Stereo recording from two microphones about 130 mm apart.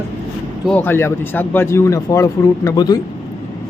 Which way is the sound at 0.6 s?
15° left (ahead or behind).